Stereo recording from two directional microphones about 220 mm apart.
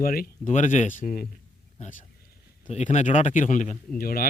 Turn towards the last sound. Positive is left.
turn(degrees=40)  # may be behind; listen again after turning